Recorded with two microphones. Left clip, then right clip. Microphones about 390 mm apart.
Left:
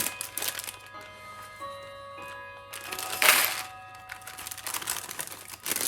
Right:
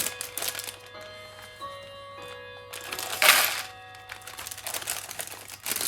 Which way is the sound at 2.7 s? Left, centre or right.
Centre.